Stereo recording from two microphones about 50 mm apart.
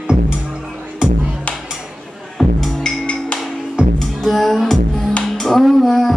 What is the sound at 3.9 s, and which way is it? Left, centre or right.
Music, centre.